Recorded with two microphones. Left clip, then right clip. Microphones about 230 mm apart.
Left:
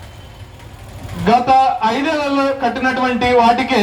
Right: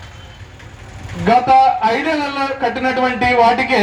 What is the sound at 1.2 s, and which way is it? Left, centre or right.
A man's voice, right.